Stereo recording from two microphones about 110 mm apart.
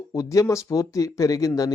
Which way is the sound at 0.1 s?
30° left (ahead or behind).